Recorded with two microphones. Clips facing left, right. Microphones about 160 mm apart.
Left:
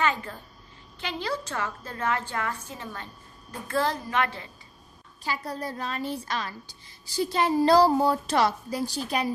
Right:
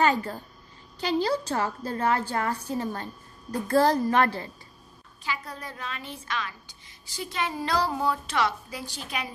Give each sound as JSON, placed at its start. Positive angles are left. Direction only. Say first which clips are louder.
{"t": 0.0, "sound": "a child's voice", "louder": "right 4 dB", "side_deg": -40}
{"t": 5.2, "sound": "a woman's voice", "louder": "left 3 dB", "side_deg": 35}